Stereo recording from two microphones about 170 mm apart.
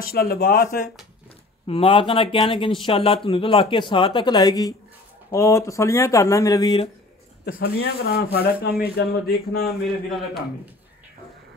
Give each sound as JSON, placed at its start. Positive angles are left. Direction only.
{"t": 0.0, "sound": "a man's voice", "side_deg": 60}
{"t": 1.7, "sound": "a woman's voice", "side_deg": 30}
{"t": 7.4, "sound": "a man's voice", "side_deg": 65}
{"t": 9.8, "sound": "speech", "side_deg": 0}